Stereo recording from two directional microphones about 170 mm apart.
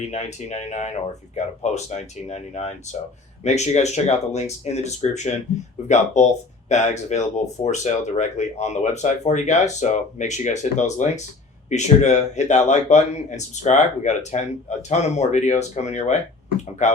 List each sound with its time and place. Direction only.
0.0 s speech: 40° left (ahead or behind)
6.7 s speech: 45° left (ahead or behind)